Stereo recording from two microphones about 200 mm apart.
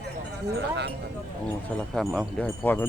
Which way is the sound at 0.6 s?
60° right (ahead or behind).